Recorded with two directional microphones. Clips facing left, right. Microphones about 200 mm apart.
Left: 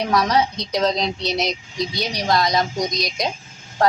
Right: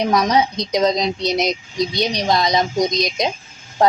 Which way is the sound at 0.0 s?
20° right (ahead or behind).